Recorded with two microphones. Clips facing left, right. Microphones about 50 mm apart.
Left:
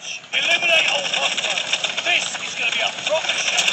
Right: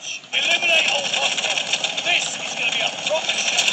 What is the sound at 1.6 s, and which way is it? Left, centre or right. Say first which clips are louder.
Engine: left 1 dB; left.